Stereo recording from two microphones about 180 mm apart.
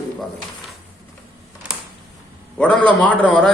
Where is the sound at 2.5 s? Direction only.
5° left (ahead or behind).